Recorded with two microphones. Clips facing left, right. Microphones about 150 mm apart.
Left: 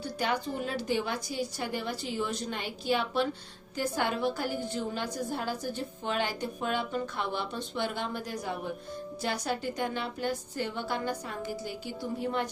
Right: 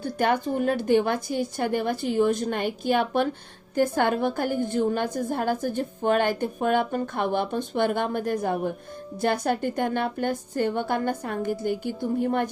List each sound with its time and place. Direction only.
0.0 s a woman's voice: 50° right (ahead or behind)